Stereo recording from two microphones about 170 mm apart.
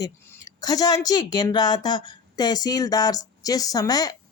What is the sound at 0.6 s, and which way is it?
A woman's voice, 20° left (ahead or behind).